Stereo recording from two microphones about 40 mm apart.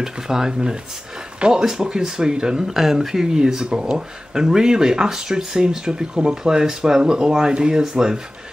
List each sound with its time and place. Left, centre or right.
0.0 s speech: centre
2.7 s speech: centre